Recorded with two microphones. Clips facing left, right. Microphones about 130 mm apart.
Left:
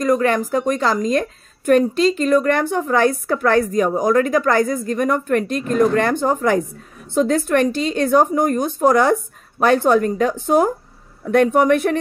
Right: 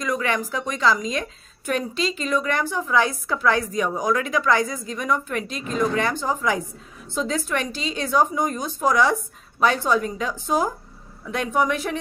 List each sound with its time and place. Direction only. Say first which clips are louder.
0.0 s a woman's voice: left 8 dB; 45° left (ahead or behind)